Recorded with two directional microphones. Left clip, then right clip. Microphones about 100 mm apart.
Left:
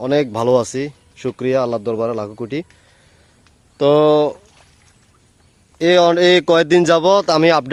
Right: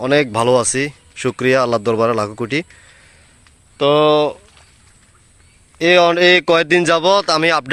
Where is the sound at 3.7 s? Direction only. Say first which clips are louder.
Even; 45° left (ahead or behind).